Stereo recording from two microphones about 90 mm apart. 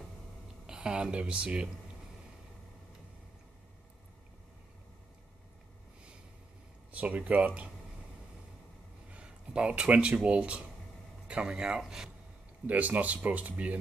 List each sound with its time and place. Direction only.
0.7 s speech: 10° right (ahead or behind)
6.9 s speech: 15° right (ahead or behind)
9.1 s speech: 10° right (ahead or behind)
12.6 s speech: 20° right (ahead or behind)